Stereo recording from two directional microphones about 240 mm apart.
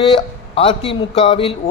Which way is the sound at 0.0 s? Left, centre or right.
Centre.